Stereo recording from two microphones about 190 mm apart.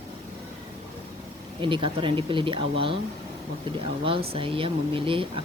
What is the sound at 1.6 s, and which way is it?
Speech, 25° right (ahead or behind).